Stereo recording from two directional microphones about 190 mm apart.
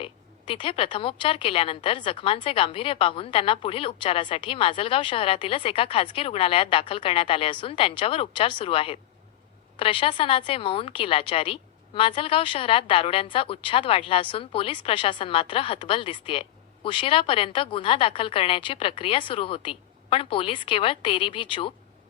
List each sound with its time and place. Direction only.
0.0 s a woman's voice: 25° left (ahead or behind)